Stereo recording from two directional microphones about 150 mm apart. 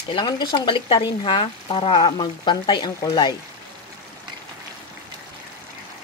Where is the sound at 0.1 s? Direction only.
30° left (ahead or behind).